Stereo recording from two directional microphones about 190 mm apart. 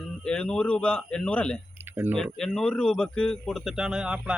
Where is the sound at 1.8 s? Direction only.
10° right (ahead or behind).